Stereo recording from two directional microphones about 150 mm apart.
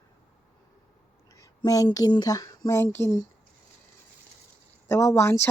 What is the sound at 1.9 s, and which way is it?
Speech, 25° left (ahead or behind).